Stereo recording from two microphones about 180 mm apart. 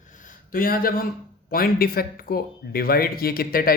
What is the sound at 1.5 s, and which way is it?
Speech, 55° left (ahead or behind).